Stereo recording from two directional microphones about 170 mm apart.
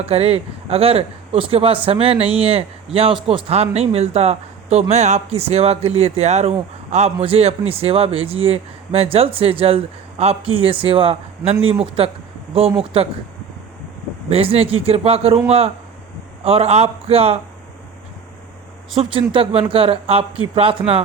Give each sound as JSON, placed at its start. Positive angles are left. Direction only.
{"t": 0.0, "sound": "speech", "side_deg": -35}
{"t": 14.3, "sound": "speech", "side_deg": -35}
{"t": 19.3, "sound": "speech", "side_deg": -35}